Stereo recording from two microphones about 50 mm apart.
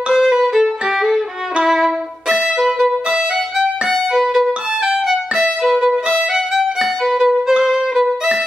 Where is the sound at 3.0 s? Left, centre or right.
Centre.